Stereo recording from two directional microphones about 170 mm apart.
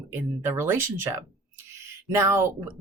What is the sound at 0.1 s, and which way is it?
Speech, 15° right (ahead or behind).